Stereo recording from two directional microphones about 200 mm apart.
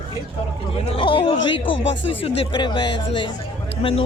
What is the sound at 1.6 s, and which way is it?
Speech, 70° left (ahead or behind).